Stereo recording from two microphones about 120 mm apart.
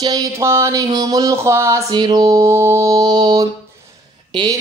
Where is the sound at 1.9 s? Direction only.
35° right (ahead or behind).